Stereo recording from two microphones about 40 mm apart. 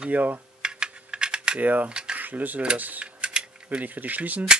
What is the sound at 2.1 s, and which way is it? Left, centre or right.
Cutlery, right.